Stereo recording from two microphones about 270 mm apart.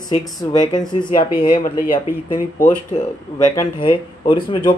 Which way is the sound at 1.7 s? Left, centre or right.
Left.